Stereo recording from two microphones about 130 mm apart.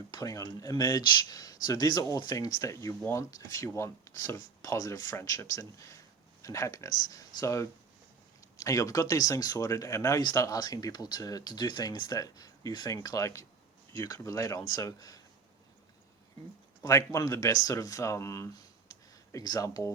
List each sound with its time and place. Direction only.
0.1 s speech: 25° left (ahead or behind)
16.8 s speech: 25° left (ahead or behind)